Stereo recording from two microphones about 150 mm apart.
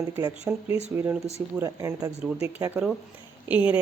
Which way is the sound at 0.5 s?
15° right (ahead or behind).